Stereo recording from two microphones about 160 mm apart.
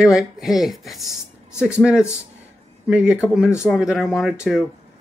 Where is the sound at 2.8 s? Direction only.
10° right (ahead or behind).